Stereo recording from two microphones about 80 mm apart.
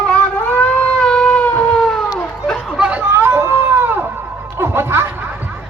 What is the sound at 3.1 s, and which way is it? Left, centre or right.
Baby cry, right.